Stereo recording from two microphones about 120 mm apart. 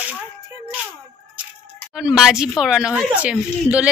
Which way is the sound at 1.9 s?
5° right (ahead or behind).